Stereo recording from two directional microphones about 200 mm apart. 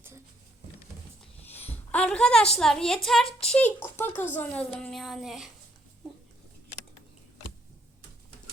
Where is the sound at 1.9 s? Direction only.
5° left (ahead or behind).